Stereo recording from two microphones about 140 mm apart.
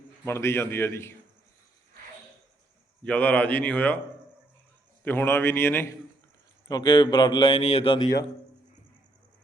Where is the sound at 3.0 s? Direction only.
10° left (ahead or behind).